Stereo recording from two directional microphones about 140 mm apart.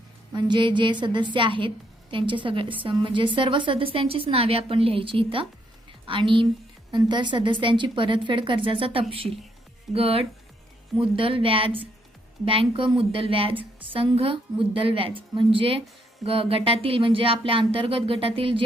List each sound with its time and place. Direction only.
0.3 s a woman's voice: 35° right (ahead or behind)